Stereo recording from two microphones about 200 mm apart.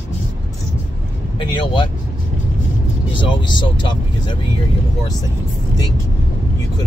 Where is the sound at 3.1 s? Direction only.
25° left (ahead or behind).